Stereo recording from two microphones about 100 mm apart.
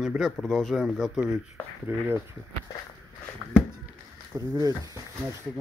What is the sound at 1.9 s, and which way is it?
Speech, 20° right (ahead or behind).